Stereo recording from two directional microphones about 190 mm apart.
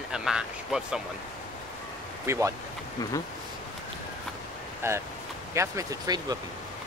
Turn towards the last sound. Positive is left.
turn(degrees=-20)  # may be behind; listen again after turning